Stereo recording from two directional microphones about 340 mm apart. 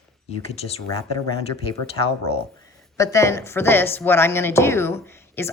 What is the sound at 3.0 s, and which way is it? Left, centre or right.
A woman's voice, centre.